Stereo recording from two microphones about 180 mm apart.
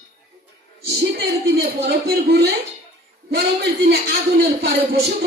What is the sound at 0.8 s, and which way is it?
A man's voice, 65° right (ahead or behind).